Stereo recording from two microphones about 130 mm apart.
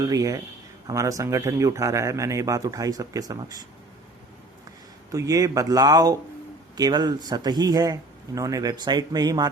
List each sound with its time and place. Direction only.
0.0 s speech: 25° right (ahead or behind)
5.1 s speech: 25° right (ahead or behind)